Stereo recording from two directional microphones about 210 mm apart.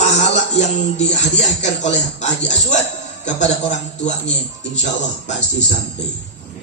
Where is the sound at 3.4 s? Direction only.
35° left (ahead or behind).